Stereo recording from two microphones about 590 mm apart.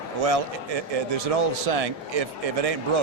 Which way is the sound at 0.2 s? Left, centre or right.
Right.